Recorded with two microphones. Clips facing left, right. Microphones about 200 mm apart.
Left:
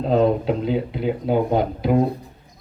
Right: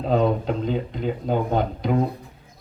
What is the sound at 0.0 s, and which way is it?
Speech, centre (ahead or behind).